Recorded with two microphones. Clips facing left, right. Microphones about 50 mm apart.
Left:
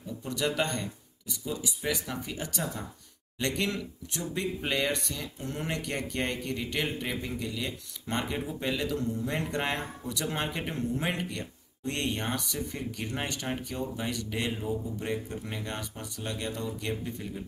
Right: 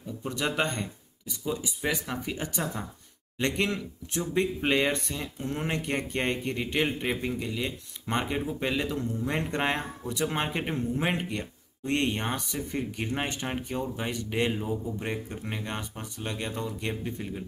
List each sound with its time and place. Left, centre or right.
0.2 s speech: right